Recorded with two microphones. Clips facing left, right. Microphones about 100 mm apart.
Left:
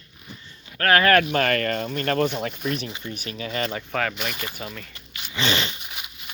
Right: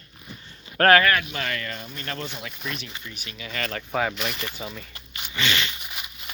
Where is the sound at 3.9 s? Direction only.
10° right (ahead or behind).